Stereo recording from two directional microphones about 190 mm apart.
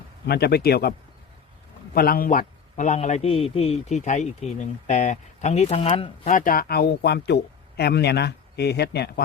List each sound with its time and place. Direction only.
0.3 s a man's voice: 55° left (ahead or behind); by 6.3 s 30° left (ahead or behind)
6.3 s speech: 50° left (ahead or behind)